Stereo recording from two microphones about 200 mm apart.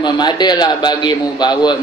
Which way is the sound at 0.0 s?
20° left (ahead or behind).